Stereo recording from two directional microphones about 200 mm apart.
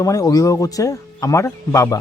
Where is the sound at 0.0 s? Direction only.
15° left (ahead or behind).